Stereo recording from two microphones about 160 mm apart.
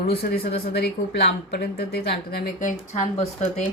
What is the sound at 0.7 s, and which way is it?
Speech, 80° left.